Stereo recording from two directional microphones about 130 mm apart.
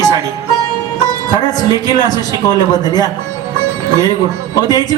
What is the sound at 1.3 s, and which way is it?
A man's voice, 30° left (ahead or behind).